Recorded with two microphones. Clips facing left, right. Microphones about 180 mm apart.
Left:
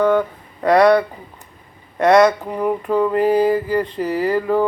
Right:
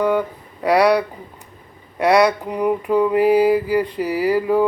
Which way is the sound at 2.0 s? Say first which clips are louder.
Left 2 dB; 10° right (ahead or behind).